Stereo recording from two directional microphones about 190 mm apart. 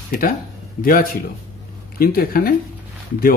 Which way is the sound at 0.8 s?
50° left (ahead or behind).